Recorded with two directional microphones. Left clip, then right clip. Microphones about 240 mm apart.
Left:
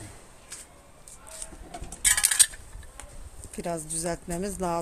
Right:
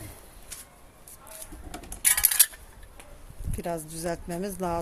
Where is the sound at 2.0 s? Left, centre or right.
Centre.